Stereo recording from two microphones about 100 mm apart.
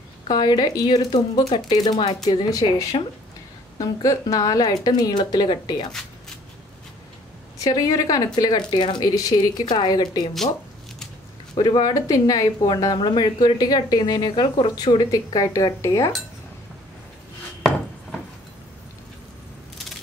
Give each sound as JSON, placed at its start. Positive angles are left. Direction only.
{"t": 0.3, "sound": "speech", "side_deg": 45}
{"t": 5.9, "sound": "shuffling cards", "side_deg": 5}
{"t": 7.5, "sound": "speech", "side_deg": 35}
{"t": 9.0, "sound": "speech", "side_deg": 35}
{"t": 11.5, "sound": "speech", "side_deg": 45}
{"t": 15.0, "sound": "speech", "side_deg": 35}